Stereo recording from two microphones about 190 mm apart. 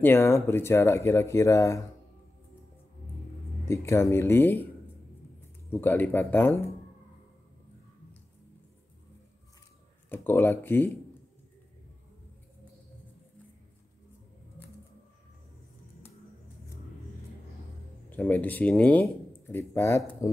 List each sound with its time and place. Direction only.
0.0 s speech: 10° left (ahead or behind)
3.6 s speech: 15° left (ahead or behind)
5.7 s speech: 10° left (ahead or behind)
10.0 s speech: 10° left (ahead or behind)
18.1 s speech: 10° left (ahead or behind)